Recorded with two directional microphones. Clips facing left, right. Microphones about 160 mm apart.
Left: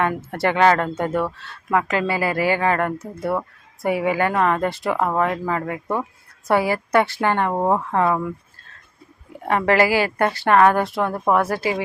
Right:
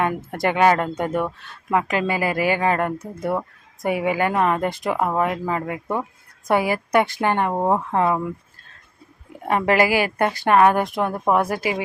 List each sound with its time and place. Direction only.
0.0 s speech: 15° right (ahead or behind)
7.5 s speech: centre (ahead or behind)
7.9 s speech: 20° right (ahead or behind)
9.5 s speech: 20° right (ahead or behind)